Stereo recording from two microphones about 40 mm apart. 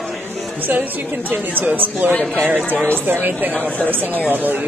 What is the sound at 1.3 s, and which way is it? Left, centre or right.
Speech, right.